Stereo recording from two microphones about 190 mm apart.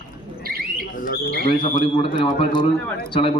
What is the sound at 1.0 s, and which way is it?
Bird, 50° left (ahead or behind).